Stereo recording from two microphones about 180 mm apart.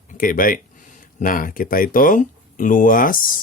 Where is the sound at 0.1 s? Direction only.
50° left (ahead or behind).